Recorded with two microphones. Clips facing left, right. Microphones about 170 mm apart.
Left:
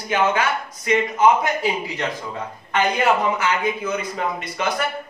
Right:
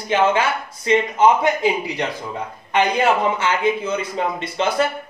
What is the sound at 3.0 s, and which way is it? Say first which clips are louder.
A man's voice: right 1 dB; 25° right (ahead or behind).